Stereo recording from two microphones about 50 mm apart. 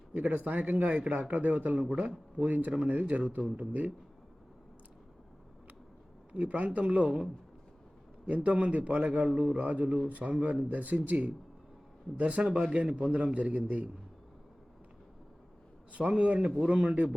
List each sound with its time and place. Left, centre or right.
0.1 s speech: right
6.3 s speech: right
8.3 s speech: right
15.9 s speech: right